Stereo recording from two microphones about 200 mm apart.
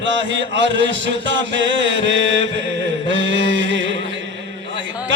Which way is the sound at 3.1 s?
65° right (ahead or behind).